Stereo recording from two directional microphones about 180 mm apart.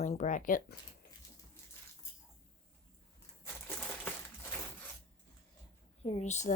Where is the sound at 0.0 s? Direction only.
45° left (ahead or behind).